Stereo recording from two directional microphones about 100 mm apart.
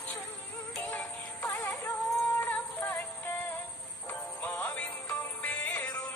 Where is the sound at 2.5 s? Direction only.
15° left (ahead or behind).